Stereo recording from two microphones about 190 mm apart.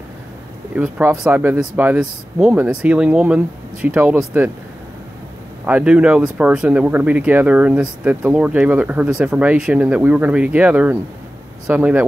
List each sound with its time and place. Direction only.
0.7 s speech: 10° right (ahead or behind)
5.7 s speech: 5° right (ahead or behind)